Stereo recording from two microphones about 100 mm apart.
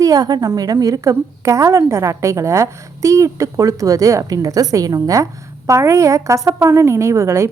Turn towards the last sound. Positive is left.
turn(degrees=-30)  # may be behind; listen again after turning